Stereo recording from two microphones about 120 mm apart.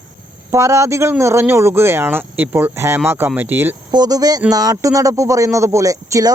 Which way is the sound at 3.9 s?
35° right (ahead or behind).